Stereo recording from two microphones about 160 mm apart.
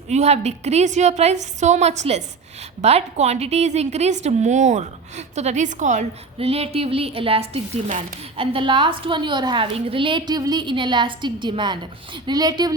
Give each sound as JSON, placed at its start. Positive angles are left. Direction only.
{"t": 0.1, "sound": "a woman's voice", "side_deg": -45}
{"t": 8.5, "sound": "a woman's voice", "side_deg": -30}